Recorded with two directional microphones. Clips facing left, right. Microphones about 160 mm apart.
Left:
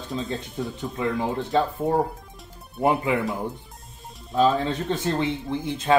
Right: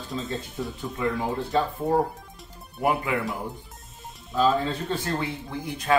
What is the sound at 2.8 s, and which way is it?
Speech, 25° left (ahead or behind).